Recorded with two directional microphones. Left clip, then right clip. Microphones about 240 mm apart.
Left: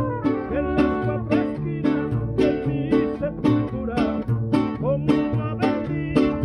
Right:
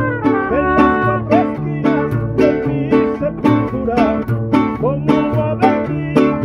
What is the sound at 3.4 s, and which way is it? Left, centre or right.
Music, left.